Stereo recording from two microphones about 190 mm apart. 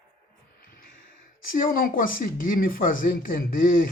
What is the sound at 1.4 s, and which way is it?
Speech, 45° left (ahead or behind).